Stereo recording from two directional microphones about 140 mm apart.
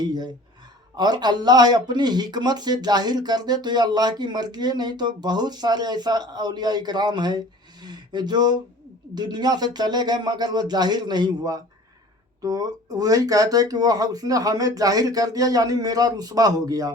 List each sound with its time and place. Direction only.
0.0 s speech: 30° right (ahead or behind)